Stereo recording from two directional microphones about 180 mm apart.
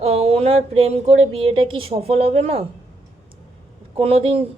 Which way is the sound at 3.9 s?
30° right (ahead or behind).